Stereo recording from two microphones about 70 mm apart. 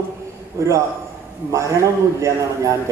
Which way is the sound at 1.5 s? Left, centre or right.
Right.